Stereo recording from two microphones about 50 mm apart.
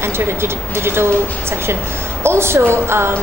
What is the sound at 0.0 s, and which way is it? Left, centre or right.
A woman's voice, right.